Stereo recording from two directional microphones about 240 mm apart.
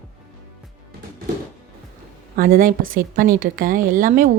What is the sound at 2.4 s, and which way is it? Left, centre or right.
A woman's voice, right.